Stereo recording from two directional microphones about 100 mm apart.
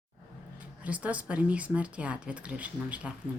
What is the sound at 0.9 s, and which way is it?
Speech, 15° right (ahead or behind).